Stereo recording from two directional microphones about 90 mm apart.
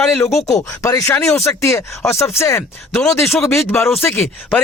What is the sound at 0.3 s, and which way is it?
Speech, 35° left (ahead or behind).